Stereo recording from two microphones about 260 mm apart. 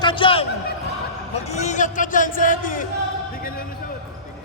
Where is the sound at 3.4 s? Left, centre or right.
Left.